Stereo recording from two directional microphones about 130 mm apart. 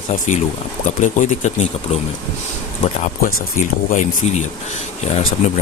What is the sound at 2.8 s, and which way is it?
Speech, 80° left.